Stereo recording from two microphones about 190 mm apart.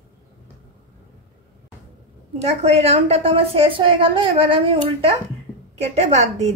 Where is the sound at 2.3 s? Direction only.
35° right (ahead or behind).